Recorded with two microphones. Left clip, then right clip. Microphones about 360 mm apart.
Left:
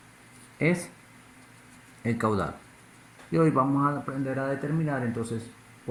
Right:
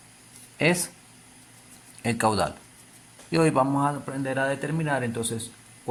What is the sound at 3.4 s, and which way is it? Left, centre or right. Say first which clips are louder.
Speech: right 2 dB; right.